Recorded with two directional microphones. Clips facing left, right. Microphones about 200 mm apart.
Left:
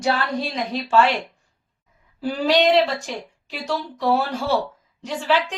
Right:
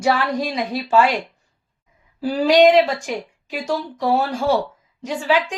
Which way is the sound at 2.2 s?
5° right (ahead or behind).